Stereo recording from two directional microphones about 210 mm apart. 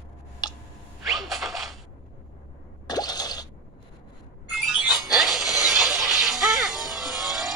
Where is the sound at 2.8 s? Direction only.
20° left (ahead or behind).